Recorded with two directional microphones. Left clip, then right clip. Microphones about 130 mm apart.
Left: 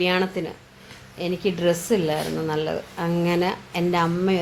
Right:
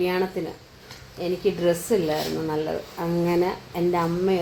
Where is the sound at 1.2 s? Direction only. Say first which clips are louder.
Even; 55° left (ahead or behind).